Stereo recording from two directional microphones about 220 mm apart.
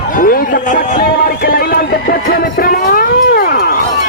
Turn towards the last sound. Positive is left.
turn(degrees=45)  # may be behind; listen again after turning